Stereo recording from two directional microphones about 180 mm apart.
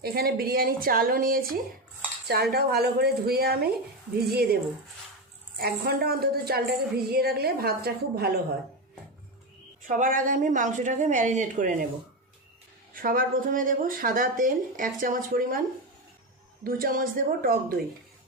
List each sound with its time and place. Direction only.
0.0 s a woman's voice: 60° right (ahead or behind)
5.5 s a woman's voice: 60° right (ahead or behind)
9.8 s speech: 45° right (ahead or behind)
12.9 s speech: 50° right (ahead or behind)
16.6 s speech: 55° right (ahead or behind)